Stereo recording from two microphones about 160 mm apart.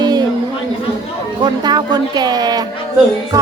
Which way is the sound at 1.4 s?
25° right (ahead or behind).